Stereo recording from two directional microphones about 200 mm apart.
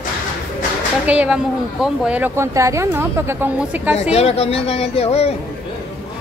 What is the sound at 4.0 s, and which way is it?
Speech, 30° left (ahead or behind).